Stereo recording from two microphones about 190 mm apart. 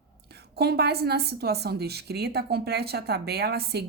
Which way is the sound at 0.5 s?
55° right (ahead or behind).